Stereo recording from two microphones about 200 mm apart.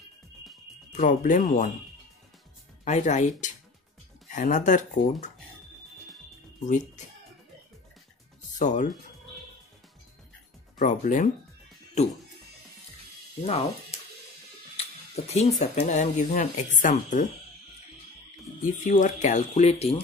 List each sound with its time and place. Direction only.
0.9 s speech: 40° left (ahead or behind)
2.8 s speech: 35° left (ahead or behind)
8.5 s speech: 35° left (ahead or behind)
10.8 s speech: 40° left (ahead or behind)
13.5 s speech: 30° left (ahead or behind)
14.8 s a sound: 30° left (ahead or behind)
15.6 s speech: 35° left (ahead or behind)
18.6 s speech: 40° left (ahead or behind)